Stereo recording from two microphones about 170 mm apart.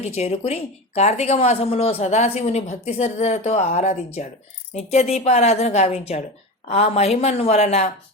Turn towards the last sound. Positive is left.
turn(degrees=40)  # may be behind; listen again after turning